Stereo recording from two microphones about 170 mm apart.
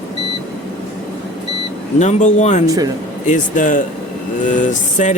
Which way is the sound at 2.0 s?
45° left (ahead or behind).